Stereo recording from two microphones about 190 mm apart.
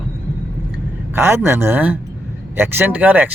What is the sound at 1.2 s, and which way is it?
Speech, 15° right (ahead or behind).